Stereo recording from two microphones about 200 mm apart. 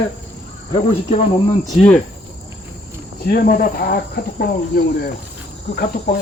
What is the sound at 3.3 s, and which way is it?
Speech, 45° left (ahead or behind).